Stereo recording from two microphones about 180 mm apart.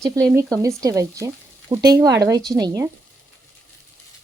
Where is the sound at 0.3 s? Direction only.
15° right (ahead or behind).